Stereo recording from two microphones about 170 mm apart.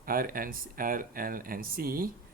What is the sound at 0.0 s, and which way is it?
Speech, 60° right (ahead or behind).